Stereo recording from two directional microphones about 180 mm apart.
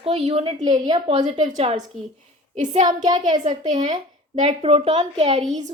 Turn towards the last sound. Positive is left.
turn(degrees=-35)  # may be behind; listen again after turning